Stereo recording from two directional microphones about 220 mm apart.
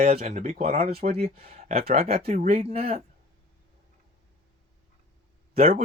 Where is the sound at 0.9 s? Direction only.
45° right (ahead or behind).